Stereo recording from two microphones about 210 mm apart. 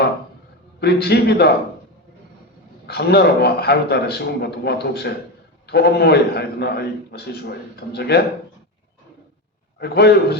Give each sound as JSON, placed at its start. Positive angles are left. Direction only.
{"t": 0.8, "sound": "a man's voice", "side_deg": 50}
{"t": 2.8, "sound": "a man's voice", "side_deg": 50}
{"t": 9.7, "sound": "a man's voice", "side_deg": 50}